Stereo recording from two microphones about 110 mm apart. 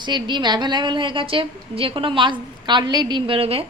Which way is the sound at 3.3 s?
60° right (ahead or behind).